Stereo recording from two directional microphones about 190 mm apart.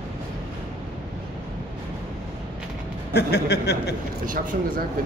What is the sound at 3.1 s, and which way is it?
Speech, 60° left (ahead or behind).